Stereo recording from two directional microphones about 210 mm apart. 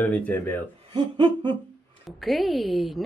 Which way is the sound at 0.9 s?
20° right (ahead or behind).